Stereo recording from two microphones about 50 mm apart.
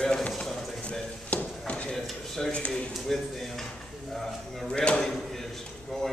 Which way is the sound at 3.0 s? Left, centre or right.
Centre.